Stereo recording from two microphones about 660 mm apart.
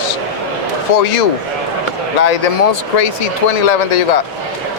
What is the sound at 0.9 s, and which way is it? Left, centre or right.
Speech, left.